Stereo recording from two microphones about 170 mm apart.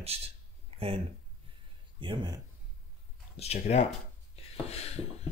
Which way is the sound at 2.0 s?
30° right (ahead or behind).